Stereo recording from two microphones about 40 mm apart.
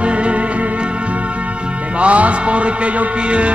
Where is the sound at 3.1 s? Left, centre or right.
Right.